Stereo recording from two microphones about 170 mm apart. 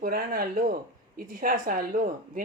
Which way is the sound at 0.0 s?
55° right (ahead or behind).